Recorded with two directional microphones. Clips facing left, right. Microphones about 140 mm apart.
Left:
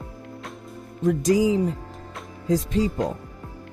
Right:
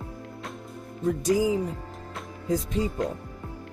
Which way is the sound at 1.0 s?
90° left.